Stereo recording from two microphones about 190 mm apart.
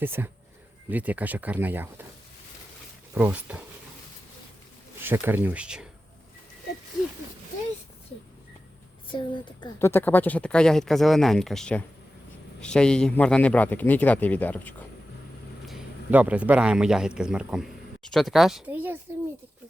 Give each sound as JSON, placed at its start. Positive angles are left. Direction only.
{"t": 0.0, "sound": "speech", "side_deg": -10}
{"t": 3.2, "sound": "speech", "side_deg": -10}
{"t": 5.0, "sound": "speech", "side_deg": -10}
{"t": 9.1, "sound": "a woman's voice", "side_deg": 25}
{"t": 9.7, "sound": "a man's voice", "side_deg": 10}
{"t": 15.6, "sound": "speech", "side_deg": -5}